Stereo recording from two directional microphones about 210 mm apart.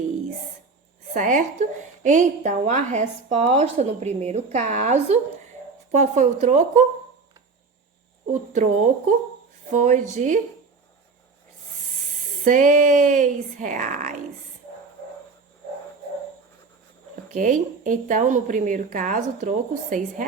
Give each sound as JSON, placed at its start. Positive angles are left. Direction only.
{"t": 1.1, "sound": "a woman's voice", "side_deg": -35}
{"t": 8.3, "sound": "a woman's voice", "side_deg": -35}
{"t": 12.5, "sound": "a woman's voice", "side_deg": -40}
{"t": 17.3, "sound": "a woman's voice", "side_deg": -40}